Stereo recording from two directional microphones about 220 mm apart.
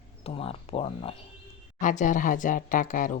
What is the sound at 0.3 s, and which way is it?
Speech, 25° left (ahead or behind).